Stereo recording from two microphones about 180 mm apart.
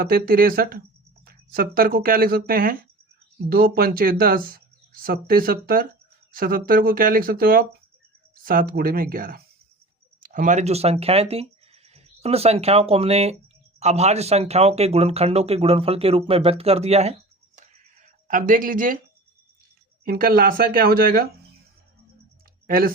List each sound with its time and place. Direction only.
0.0 s speech: 55° right (ahead or behind)
20.1 s speech: 50° right (ahead or behind)
22.6 s speech: 55° right (ahead or behind)